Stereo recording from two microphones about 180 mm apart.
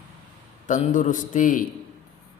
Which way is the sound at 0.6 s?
45° left (ahead or behind).